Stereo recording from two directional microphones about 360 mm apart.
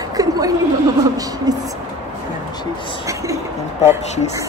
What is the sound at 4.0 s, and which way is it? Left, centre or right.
Speech, centre.